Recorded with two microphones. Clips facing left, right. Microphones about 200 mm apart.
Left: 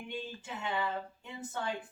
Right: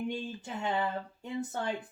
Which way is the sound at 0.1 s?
40° right (ahead or behind).